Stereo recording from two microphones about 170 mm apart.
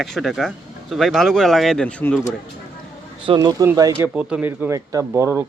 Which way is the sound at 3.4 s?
20° right (ahead or behind).